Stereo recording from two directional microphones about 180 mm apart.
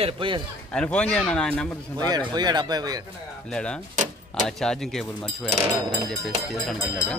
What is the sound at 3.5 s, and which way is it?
Speech, 5° left (ahead or behind).